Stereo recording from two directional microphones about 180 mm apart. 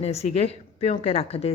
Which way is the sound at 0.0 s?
35° left (ahead or behind).